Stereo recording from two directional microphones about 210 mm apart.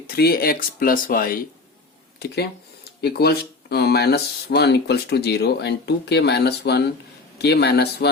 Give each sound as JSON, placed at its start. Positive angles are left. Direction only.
{"t": 0.1, "sound": "speech", "side_deg": 45}